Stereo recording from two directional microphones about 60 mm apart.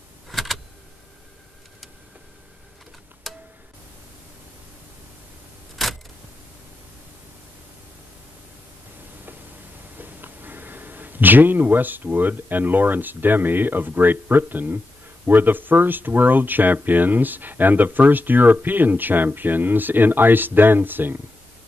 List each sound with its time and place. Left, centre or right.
0.3 s vehicle: centre
3.3 s tick-tock: centre
9.9 s speech: right